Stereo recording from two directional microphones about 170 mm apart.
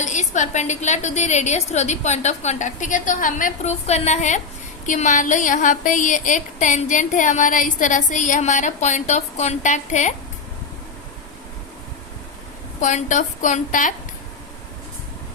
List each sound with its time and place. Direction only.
0.0 s a woman's voice: 45° left (ahead or behind)
12.8 s a woman's voice: 45° left (ahead or behind)